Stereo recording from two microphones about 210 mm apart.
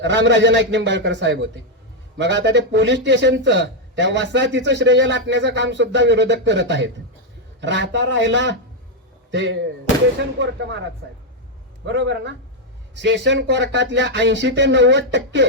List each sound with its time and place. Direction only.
0.0 s a man's voice: 60° right (ahead or behind)
11.9 s a man's voice: 60° right (ahead or behind)